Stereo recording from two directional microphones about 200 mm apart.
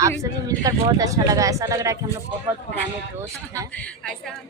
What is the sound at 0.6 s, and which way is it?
Speech, 15° right (ahead or behind).